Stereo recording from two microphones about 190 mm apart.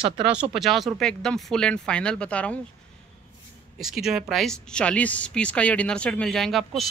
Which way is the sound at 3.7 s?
Centre (ahead or behind).